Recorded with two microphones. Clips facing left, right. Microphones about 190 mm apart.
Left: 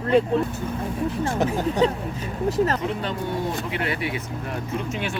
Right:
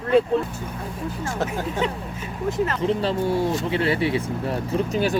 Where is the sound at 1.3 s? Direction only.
15° left (ahead or behind).